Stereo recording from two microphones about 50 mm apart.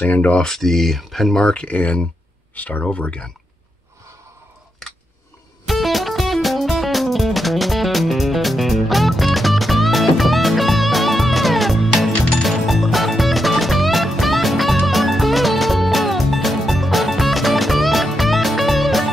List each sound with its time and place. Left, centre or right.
0.0 s speech: left
0.4 s speech: centre
1.4 s speech: left
2.8 s speech: left
5.7 s music: centre